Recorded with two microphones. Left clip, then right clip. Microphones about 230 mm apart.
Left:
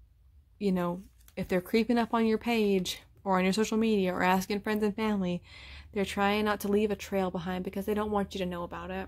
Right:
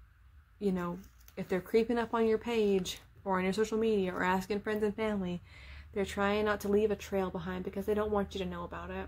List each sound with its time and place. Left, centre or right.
0.6 s speech: left